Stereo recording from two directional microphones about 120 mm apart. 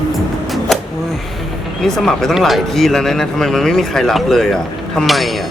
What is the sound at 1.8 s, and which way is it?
Speech, 5° left (ahead or behind).